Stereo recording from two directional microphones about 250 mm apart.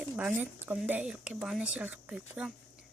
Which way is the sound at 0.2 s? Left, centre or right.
Centre.